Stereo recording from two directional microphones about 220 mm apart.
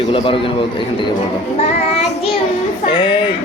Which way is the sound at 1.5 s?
30° left (ahead or behind).